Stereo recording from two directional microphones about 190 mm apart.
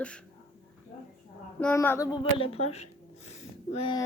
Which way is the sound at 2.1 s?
30° left (ahead or behind).